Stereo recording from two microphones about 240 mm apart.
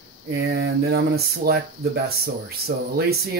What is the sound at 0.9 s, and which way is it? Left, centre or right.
Speech, right.